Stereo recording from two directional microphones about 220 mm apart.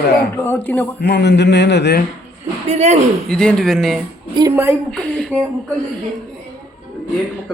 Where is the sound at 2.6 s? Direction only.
30° right (ahead or behind).